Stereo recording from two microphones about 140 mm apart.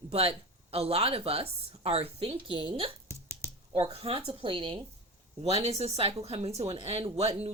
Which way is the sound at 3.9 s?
45° right (ahead or behind).